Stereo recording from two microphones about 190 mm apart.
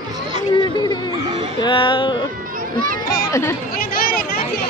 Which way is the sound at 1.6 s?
25° left (ahead or behind).